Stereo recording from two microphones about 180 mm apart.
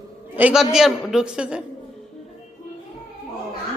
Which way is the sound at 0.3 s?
5° right (ahead or behind).